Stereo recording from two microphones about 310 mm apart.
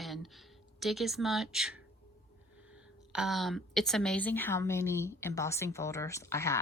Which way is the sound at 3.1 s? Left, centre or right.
Centre.